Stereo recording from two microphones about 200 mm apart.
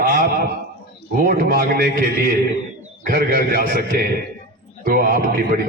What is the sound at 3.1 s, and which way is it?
A man's voice, 45° right (ahead or behind).